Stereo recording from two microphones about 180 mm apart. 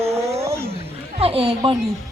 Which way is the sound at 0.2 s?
35° right (ahead or behind).